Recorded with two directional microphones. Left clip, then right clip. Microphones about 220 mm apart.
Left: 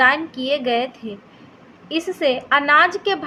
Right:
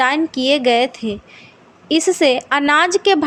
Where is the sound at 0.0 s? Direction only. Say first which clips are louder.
Right 1 dB; 45° right (ahead or behind).